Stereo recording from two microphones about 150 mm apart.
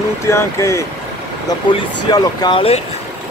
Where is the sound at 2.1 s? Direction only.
30° left (ahead or behind).